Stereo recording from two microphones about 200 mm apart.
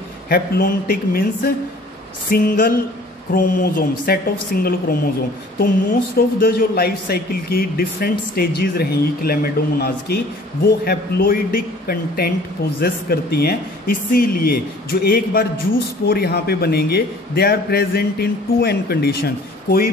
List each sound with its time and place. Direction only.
0.3 s speech: 50° left (ahead or behind)